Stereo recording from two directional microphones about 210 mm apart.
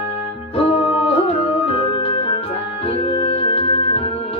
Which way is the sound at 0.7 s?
25° left (ahead or behind).